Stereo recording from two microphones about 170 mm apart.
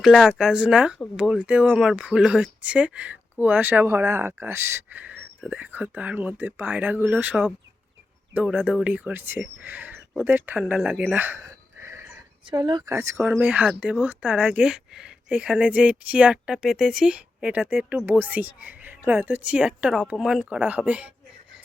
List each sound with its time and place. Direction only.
0.0 s speech: centre (ahead or behind); by 12.0 s 15° right (ahead or behind)
12.5 s speech: 30° right (ahead or behind)
12.9 s speech: 15° right (ahead or behind)